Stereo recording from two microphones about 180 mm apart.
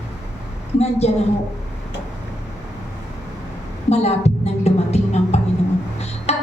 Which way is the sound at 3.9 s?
35° left (ahead or behind).